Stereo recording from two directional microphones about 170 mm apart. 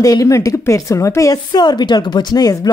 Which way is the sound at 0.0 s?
20° left (ahead or behind).